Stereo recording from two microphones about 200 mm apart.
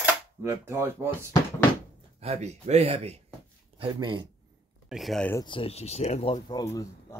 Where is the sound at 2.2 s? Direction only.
35° right (ahead or behind).